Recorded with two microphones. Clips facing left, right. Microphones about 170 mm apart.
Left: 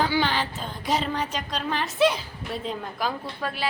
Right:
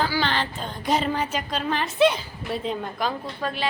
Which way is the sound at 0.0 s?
15° left (ahead or behind).